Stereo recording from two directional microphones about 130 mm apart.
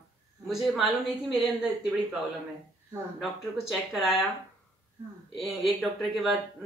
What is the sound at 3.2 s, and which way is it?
Speech, centre (ahead or behind).